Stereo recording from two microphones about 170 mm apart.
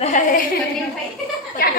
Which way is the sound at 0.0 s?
50° left (ahead or behind).